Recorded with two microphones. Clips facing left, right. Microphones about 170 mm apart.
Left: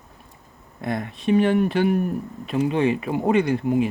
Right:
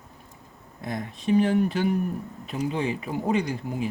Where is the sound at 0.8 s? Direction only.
65° left (ahead or behind).